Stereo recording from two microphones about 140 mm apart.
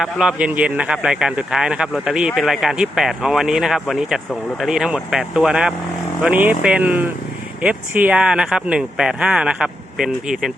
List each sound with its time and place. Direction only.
0.0 s speech: 5° right (ahead or behind)